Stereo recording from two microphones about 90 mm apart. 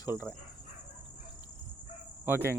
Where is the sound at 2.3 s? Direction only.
25° right (ahead or behind).